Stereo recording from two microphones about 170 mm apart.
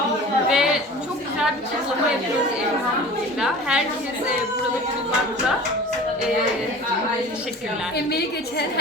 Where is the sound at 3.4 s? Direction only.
5° right (ahead or behind).